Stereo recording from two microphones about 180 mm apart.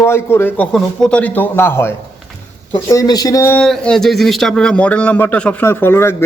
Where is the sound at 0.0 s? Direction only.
15° left (ahead or behind).